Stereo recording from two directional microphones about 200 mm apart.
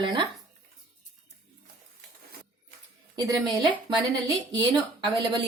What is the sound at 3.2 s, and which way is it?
Speech, 20° right (ahead or behind).